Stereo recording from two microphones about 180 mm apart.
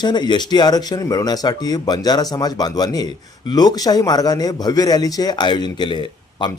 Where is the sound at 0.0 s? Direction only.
25° left (ahead or behind).